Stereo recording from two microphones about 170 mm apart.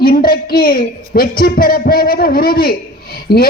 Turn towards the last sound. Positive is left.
turn(degrees=65)  # may be behind; listen again after turning